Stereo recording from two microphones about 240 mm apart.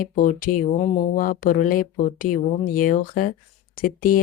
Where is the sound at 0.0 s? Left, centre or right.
Left.